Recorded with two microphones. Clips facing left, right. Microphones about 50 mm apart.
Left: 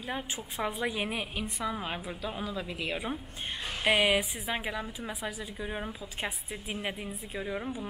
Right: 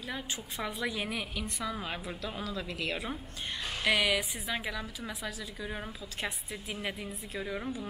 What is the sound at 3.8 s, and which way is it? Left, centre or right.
A woman's voice, left.